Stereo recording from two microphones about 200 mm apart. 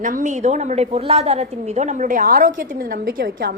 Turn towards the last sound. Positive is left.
turn(degrees=-50)  # may be behind; listen again after turning